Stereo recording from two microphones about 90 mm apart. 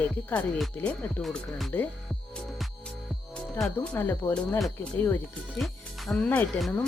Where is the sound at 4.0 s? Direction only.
25° left (ahead or behind).